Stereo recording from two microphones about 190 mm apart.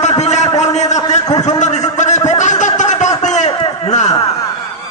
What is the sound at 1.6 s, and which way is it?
Speech, 40° left (ahead or behind).